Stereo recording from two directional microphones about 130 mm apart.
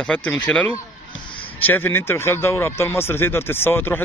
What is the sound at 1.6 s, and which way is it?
Speech, 15° left (ahead or behind).